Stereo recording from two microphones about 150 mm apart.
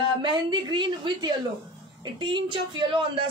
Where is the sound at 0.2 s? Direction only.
30° right (ahead or behind).